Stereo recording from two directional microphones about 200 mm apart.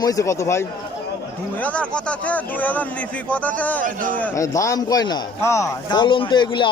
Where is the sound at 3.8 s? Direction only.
40° right (ahead or behind).